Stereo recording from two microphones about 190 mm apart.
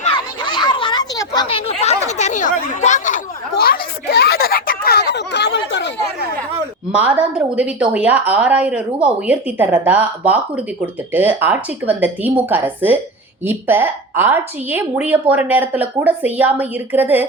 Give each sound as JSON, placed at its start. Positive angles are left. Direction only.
{"t": 0.0, "sound": "children playing", "side_deg": 25}
{"t": 1.8, "sound": "chatter", "side_deg": 35}
{"t": 3.5, "sound": "a sound", "side_deg": 55}
{"t": 6.9, "sound": "a woman's voice", "side_deg": -5}